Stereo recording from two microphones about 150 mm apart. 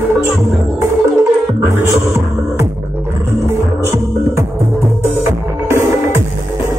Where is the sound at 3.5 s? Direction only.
15° right (ahead or behind).